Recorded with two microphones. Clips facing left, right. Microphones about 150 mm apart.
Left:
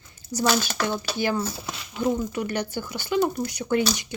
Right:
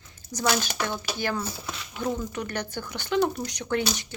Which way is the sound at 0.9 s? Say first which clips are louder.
Left 4 dB; 10° left (ahead or behind).